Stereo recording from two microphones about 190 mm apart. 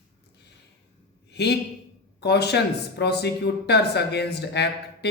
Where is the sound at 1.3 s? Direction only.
60° left (ahead or behind).